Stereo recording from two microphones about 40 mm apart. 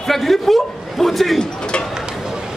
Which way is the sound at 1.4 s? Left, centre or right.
Left.